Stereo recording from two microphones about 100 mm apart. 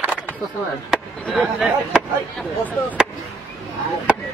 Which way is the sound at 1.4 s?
5° right (ahead or behind).